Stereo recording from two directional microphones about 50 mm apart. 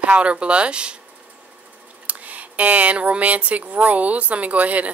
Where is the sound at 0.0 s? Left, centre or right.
Right.